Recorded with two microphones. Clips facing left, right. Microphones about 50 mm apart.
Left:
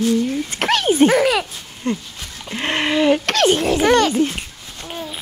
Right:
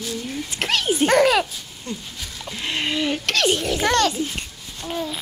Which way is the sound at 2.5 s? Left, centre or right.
Left.